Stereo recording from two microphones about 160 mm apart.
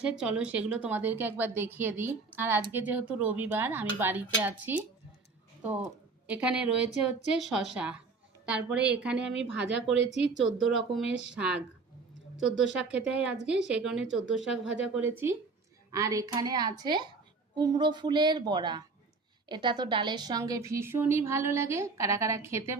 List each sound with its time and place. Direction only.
0.0 s a woman's voice: 5° right (ahead or behind)
6.2 s a woman's voice: 5° right (ahead or behind)
10.4 s a woman's voice: centre (ahead or behind)